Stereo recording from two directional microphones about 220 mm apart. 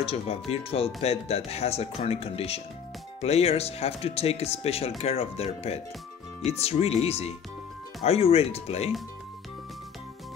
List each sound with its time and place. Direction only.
0.0 s speech: 25° left (ahead or behind)